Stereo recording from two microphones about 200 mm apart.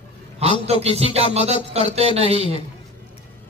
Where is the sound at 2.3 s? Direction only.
25° left (ahead or behind).